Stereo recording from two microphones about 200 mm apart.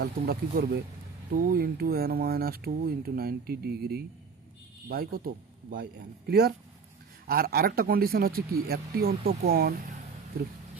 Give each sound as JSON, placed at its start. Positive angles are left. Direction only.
{"t": 0.0, "sound": "speech", "side_deg": -50}